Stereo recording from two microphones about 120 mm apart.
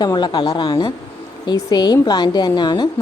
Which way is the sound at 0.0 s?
40° left (ahead or behind).